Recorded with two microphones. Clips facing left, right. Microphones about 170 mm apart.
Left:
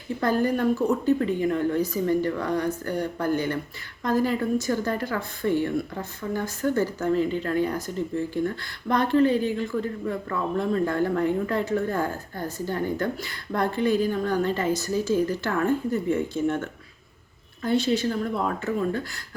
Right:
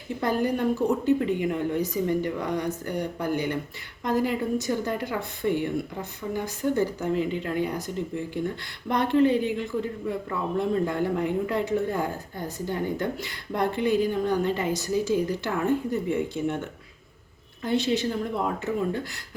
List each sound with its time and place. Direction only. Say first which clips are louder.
0.2 s a woman's voice: left 2 dB; 15° right (ahead or behind)